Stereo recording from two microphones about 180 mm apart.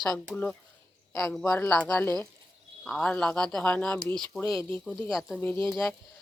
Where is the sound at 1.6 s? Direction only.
5° left (ahead or behind).